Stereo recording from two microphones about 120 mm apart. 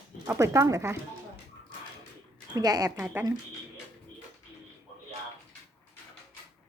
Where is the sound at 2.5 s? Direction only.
30° right (ahead or behind).